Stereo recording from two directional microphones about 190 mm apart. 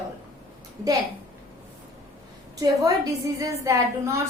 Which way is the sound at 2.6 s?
20° right (ahead or behind).